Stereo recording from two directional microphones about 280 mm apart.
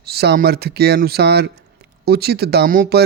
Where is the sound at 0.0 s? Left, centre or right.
Right.